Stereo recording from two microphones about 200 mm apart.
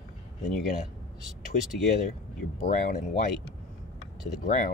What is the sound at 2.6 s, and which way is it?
Speech, 40° left (ahead or behind).